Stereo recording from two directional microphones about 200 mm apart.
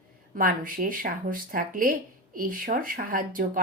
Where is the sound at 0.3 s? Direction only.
45° right (ahead or behind).